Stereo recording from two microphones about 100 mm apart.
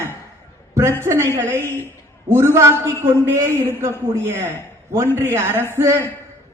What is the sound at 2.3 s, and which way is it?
A man's voice, 25° right (ahead or behind).